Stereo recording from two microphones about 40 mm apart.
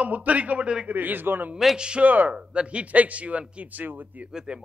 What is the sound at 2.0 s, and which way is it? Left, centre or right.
Speech, right.